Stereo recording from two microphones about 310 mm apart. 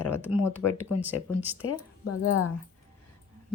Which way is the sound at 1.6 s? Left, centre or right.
Left.